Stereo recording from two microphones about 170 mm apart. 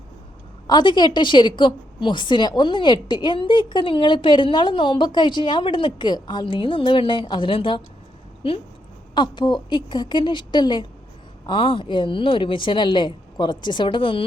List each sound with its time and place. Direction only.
0.7 s a woman's voice: 25° left (ahead or behind)